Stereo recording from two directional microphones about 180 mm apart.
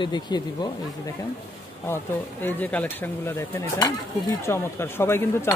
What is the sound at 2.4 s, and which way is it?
Speech, 10° left (ahead or behind).